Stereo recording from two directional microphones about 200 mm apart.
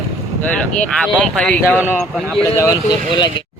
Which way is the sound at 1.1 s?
5° left (ahead or behind).